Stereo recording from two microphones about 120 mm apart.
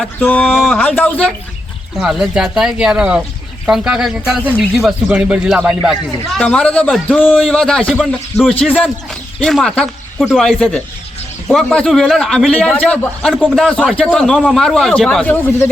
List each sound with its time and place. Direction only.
0.2 s a man's voice: 10° left (ahead or behind)
0.5 s speech: centre (ahead or behind)
0.8 s a man's voice: 10° left (ahead or behind)
2.0 s a man's voice: 5° right (ahead or behind)
5.0 s a man's voice: 15° right (ahead or behind)
6.4 s a man's voice: 10° left (ahead or behind)
15.3 s speech: 20° left (ahead or behind)